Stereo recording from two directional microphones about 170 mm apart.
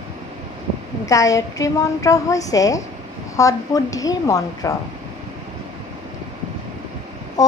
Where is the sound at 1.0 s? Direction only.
20° left (ahead or behind).